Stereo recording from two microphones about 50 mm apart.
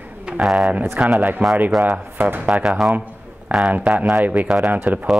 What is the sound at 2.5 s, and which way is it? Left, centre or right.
Speech, centre.